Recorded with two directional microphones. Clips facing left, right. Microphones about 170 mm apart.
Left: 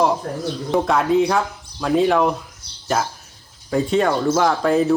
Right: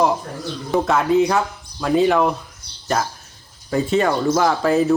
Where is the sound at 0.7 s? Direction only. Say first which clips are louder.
Right 1 dB; centre (ahead or behind).